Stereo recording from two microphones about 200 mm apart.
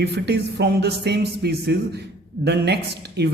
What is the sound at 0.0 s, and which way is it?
A man's voice, 55° right (ahead or behind).